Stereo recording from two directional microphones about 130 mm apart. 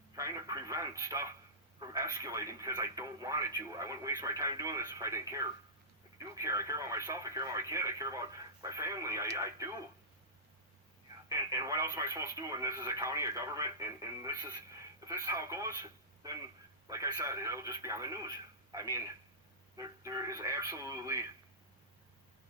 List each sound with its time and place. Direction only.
0.2 s speech: 25° right (ahead or behind)
11.3 s speech: 25° right (ahead or behind)